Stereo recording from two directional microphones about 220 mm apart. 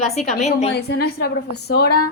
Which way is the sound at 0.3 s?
30° left (ahead or behind).